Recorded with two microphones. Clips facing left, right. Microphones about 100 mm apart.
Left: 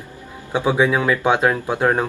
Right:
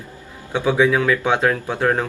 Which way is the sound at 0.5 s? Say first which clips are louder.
Right 1 dB; 20° left (ahead or behind).